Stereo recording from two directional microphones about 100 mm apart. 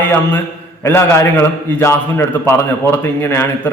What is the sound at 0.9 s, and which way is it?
A man's voice, 25° left (ahead or behind).